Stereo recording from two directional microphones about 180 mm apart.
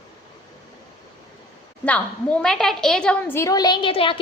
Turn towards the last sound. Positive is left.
turn(degrees=30)  # may be behind; listen again after turning